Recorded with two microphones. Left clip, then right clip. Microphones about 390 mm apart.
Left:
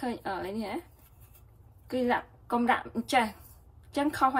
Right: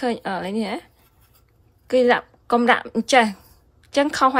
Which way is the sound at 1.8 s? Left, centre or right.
Centre.